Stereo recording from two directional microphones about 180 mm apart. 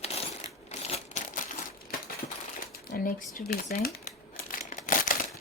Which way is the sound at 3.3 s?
55° left (ahead or behind).